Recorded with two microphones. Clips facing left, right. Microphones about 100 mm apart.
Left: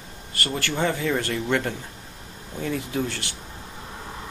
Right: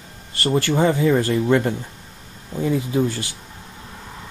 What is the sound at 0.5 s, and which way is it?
Speech, 15° right (ahead or behind).